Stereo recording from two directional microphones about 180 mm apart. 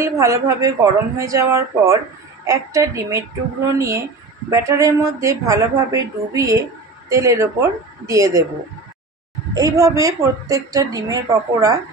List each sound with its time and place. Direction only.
0.0 s a woman's voice: 15° right (ahead or behind)
9.5 s a woman's voice: 20° right (ahead or behind)